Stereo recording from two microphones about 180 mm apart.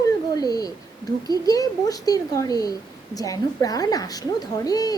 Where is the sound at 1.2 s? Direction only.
20° left (ahead or behind).